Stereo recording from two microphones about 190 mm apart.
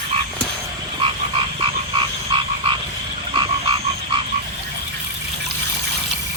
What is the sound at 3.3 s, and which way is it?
Frog, 25° right (ahead or behind).